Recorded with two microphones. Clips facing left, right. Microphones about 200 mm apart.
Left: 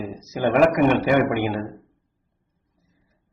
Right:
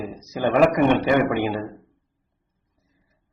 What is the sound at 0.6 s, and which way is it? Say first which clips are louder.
Speech: even; 5° left (ahead or behind).